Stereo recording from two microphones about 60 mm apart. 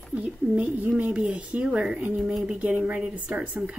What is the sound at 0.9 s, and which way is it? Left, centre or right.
A woman's voice, centre.